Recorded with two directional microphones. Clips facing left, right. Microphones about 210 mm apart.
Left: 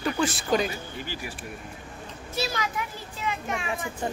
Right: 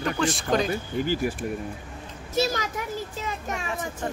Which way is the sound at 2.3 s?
45° right (ahead or behind).